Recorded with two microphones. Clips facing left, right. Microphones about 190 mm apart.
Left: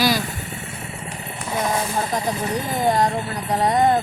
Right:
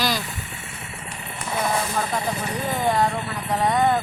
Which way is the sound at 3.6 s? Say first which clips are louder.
Left 3 dB; 35° left (ahead or behind).